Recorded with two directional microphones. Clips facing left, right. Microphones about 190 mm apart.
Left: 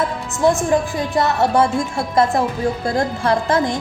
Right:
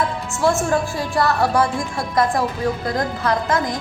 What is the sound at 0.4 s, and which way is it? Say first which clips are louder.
A woman's voice: left 3 dB; 20° left (ahead or behind).